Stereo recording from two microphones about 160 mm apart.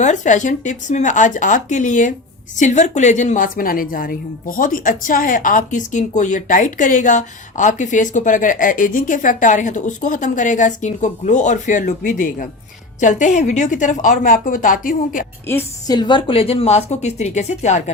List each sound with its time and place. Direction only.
0.0 s a woman's voice: 50° left (ahead or behind)
15.4 s a woman's voice: 15° left (ahead or behind)
16.0 s speech: 30° left (ahead or behind); by 17.9 s 45° left (ahead or behind)